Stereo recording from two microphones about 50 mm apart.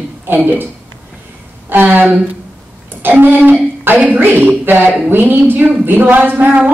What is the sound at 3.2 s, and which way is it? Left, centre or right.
A woman's voice, right.